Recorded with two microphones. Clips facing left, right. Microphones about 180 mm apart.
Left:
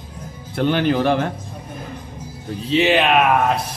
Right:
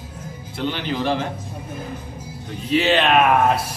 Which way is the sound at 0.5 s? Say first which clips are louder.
Left 7 dB; 55° left (ahead or behind).